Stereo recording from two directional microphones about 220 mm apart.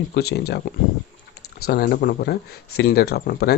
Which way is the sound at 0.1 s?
50° left (ahead or behind).